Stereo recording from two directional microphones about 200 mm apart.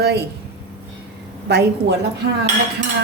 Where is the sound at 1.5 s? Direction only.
55° right (ahead or behind).